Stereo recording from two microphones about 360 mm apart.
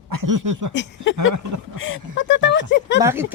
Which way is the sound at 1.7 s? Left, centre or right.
Left.